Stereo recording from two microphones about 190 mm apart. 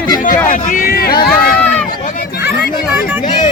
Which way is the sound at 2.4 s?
10° right (ahead or behind).